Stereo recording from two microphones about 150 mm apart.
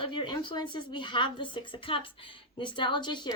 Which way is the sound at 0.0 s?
35° left (ahead or behind).